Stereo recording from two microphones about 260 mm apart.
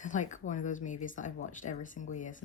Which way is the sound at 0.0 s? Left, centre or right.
Left.